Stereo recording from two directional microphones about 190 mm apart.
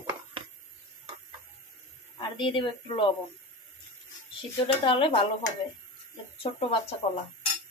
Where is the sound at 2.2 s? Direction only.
25° left (ahead or behind).